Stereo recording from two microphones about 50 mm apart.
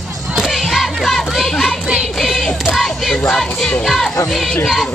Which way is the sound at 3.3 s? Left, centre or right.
Centre.